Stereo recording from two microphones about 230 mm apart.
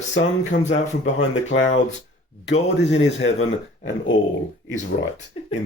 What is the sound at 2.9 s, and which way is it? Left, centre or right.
Speech, left.